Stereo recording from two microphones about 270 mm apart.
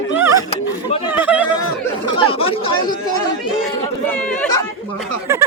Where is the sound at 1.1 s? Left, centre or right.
Centre.